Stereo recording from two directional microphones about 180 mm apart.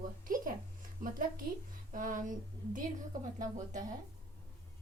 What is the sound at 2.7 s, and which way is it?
A woman's voice, 45° right (ahead or behind).